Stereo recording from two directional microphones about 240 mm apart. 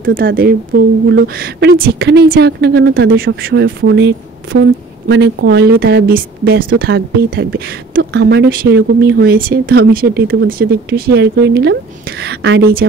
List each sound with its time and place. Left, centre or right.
0.1 s a woman's voice: right